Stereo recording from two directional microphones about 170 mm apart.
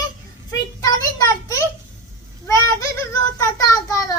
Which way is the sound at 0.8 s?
20° left (ahead or behind).